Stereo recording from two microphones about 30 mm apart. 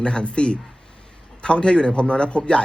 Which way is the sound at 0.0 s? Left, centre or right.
Left.